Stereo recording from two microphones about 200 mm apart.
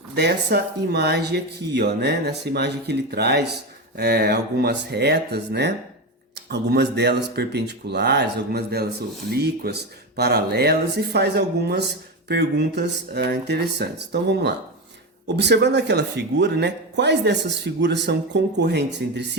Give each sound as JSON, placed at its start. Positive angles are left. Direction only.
{"t": 0.2, "sound": "speech", "side_deg": -55}